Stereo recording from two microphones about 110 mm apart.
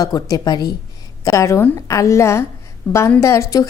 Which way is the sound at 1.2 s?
25° left (ahead or behind).